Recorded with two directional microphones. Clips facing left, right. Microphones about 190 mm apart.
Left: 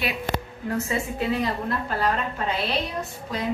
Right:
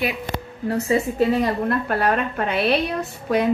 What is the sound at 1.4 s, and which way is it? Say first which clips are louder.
A woman's voice: right 5 dB; 60° right (ahead or behind).